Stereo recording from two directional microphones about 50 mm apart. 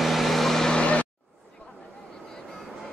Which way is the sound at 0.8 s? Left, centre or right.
Left.